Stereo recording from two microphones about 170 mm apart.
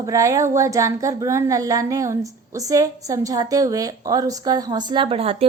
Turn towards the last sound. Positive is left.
turn(degrees=-35)  # may be behind; listen again after turning